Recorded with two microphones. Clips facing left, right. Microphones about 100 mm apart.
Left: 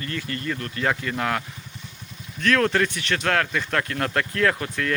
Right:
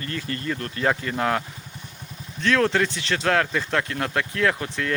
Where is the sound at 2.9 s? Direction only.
30° right (ahead or behind).